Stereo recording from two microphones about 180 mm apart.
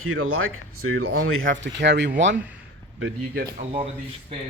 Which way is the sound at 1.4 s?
85° right.